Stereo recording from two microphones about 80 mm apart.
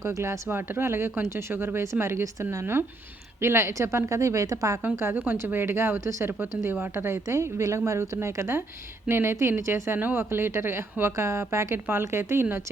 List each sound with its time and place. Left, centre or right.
0.0 s a woman's voice: right
5.1 s a woman's voice: right